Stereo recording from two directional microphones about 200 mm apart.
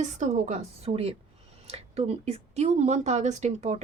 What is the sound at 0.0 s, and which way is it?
Speech, 35° right (ahead or behind).